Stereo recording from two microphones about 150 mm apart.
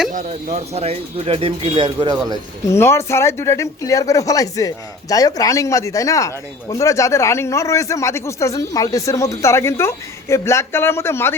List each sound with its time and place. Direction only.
0.1 s speech: 55° right (ahead or behind); by 2.1 s 30° right (ahead or behind)
2.7 s speech: 15° left (ahead or behind)